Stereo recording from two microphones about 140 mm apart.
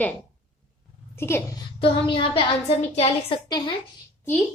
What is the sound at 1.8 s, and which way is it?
A woman's voice, 40° left (ahead or behind).